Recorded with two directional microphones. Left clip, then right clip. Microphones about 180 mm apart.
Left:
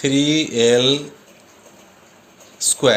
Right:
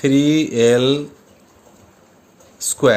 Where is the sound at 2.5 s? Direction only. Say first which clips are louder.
Right 1 dB; 60° right (ahead or behind).